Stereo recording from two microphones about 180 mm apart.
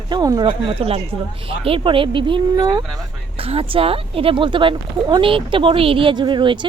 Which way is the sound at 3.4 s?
30° right (ahead or behind).